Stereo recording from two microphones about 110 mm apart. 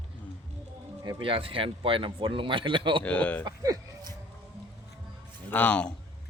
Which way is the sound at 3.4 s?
35° right (ahead or behind).